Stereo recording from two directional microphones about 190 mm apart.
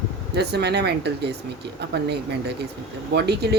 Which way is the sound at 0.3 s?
60° right (ahead or behind).